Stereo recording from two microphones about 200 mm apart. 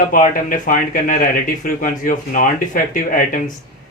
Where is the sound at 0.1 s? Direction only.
40° left (ahead or behind).